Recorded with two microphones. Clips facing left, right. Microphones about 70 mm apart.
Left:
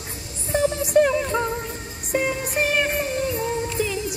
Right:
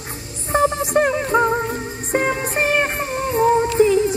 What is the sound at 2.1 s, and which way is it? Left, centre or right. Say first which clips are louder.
Music: right 3 dB; right.